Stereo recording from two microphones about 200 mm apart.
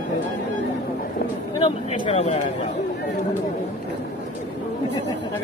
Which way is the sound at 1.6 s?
30° left (ahead or behind).